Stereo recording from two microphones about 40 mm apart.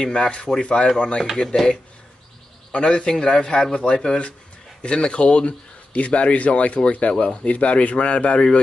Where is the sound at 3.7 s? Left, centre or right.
Left.